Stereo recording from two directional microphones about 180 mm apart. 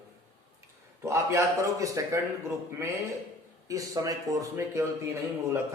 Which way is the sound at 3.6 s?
20° right (ahead or behind).